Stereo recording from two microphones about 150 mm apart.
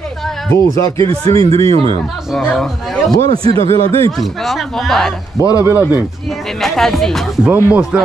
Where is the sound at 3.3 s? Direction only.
40° right (ahead or behind).